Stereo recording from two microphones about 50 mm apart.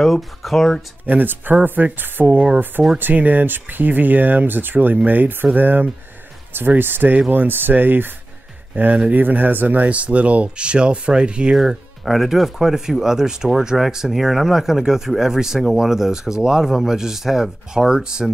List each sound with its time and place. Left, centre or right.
0.0 s speech: centre
1.0 s speech: right
2.3 s speech: right
3.0 s speech: right; by 11.5 s centre
12.0 s speech: centre